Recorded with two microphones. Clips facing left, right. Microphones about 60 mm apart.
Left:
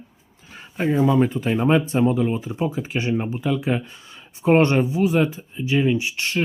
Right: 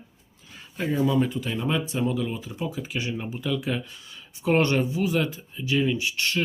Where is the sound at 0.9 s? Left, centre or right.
Left.